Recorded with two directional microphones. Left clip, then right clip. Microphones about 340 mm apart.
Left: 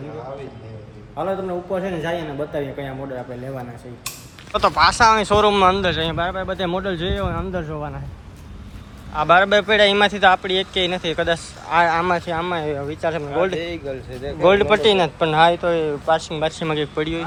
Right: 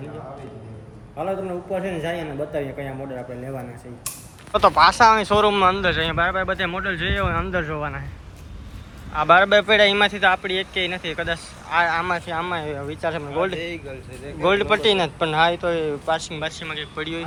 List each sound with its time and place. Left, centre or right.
1.7 s speech: centre
4.5 s speech: centre
9.1 s speech: centre
13.6 s speech: left
14.4 s speech: centre